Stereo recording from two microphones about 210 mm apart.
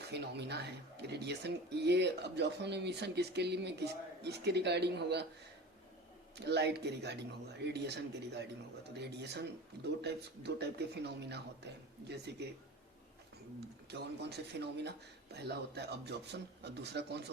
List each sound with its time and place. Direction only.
0.1 s speech: 50° right (ahead or behind)
6.3 s speech: 55° right (ahead or behind)
13.9 s speech: 50° right (ahead or behind)